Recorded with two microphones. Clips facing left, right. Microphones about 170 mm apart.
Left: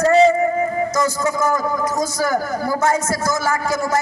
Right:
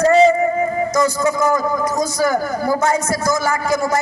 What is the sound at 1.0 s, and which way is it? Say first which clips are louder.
A man's voice: right 4 dB; 15° right (ahead or behind).